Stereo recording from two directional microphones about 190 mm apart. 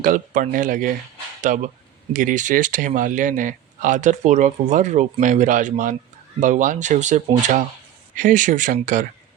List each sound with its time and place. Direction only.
0.0 s speech: 45° right (ahead or behind)